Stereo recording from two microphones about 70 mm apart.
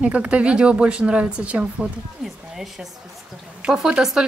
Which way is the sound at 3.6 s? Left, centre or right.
Centre.